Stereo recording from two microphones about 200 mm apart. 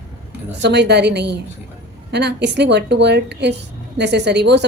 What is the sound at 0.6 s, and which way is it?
A woman's voice, 55° right (ahead or behind).